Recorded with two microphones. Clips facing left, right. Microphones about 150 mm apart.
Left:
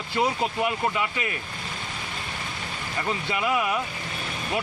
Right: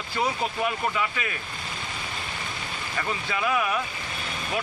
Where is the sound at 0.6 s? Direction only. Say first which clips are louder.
Even; 20° left (ahead or behind).